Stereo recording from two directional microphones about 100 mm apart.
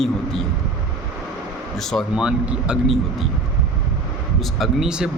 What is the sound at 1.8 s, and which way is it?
Speech, 5° left (ahead or behind).